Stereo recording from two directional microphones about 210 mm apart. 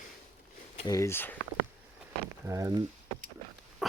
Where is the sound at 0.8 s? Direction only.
15° left (ahead or behind).